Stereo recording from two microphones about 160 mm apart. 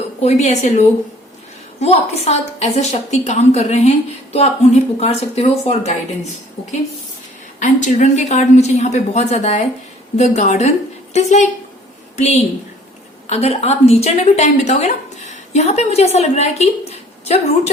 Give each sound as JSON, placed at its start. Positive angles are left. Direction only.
{"t": 0.2, "sound": "a woman's voice", "side_deg": 45}